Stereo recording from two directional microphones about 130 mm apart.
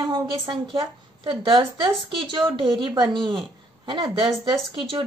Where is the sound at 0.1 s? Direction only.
40° right (ahead or behind).